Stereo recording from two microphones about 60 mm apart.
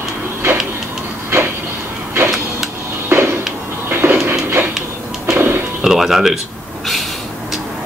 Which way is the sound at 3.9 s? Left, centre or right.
Right.